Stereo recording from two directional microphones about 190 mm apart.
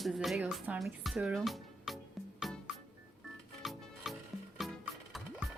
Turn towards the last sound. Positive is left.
turn(degrees=0)  # may be behind; listen again after turning